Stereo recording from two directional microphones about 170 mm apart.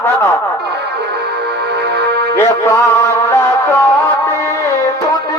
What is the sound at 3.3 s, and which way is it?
Music, 15° left (ahead or behind).